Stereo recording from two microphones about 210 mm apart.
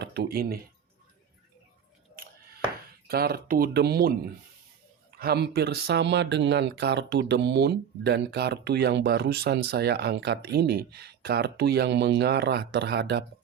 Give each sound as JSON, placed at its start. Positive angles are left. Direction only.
{"t": 0.0, "sound": "speech", "side_deg": -50}
{"t": 2.2, "sound": "a sound", "side_deg": -45}
{"t": 3.1, "sound": "speech", "side_deg": -45}